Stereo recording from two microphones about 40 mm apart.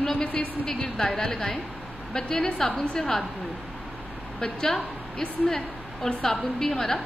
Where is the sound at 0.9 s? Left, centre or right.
Centre.